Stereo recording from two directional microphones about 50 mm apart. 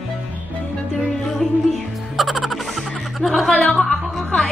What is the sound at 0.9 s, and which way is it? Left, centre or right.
Music, centre.